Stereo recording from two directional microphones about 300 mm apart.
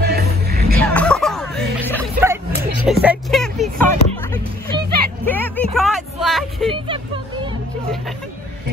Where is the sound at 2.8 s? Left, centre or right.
Centre.